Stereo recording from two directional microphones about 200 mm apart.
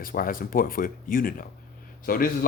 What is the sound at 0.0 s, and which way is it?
Speech, 45° left (ahead or behind).